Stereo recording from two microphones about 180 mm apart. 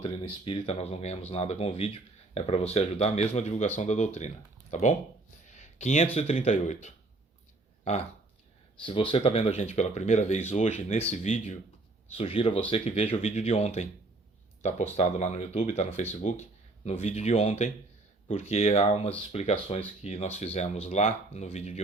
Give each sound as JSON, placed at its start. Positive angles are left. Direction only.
{"t": 0.0, "sound": "speech", "side_deg": 30}
{"t": 5.5, "sound": "a sound", "side_deg": 40}
{"t": 6.1, "sound": "speech", "side_deg": 35}
{"t": 8.8, "sound": "speech", "side_deg": 30}
{"t": 14.9, "sound": "speech", "side_deg": 40}